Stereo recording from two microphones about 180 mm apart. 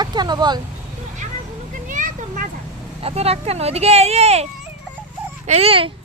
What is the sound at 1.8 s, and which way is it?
Children playing, 45° right (ahead or behind).